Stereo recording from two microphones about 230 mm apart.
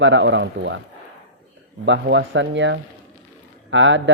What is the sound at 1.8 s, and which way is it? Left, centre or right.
Speech, right.